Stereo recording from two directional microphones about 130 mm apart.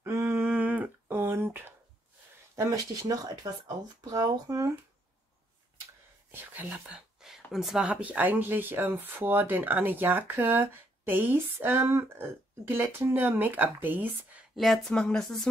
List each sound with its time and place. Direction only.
0.0 s a sound: 20° right (ahead or behind)
2.5 s speech: 25° right (ahead or behind)
6.5 s speech: 10° right (ahead or behind)
14.5 s speech: centre (ahead or behind)